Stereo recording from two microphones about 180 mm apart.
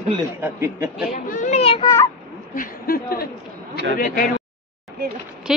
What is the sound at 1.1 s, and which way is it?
Children playing, 50° left (ahead or behind).